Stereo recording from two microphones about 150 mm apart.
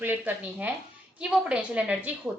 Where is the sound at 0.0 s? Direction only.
10° right (ahead or behind).